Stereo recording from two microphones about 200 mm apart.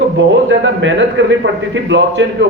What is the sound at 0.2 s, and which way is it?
A man's voice, 65° right (ahead or behind).